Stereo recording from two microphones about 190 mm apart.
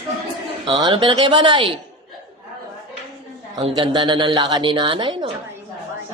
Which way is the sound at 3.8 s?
25° right (ahead or behind).